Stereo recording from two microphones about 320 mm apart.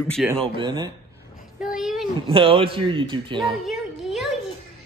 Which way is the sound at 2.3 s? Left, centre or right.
Centre.